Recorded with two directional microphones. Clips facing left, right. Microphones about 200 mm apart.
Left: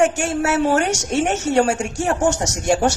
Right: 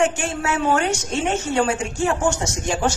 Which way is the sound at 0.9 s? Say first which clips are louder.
Left 3 dB; 75° left (ahead or behind).